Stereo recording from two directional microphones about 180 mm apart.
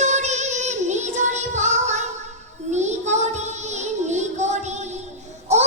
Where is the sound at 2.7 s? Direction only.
40° right (ahead or behind).